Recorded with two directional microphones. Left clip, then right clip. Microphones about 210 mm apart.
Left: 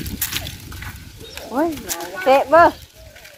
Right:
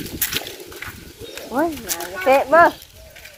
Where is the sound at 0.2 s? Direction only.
15° left (ahead or behind).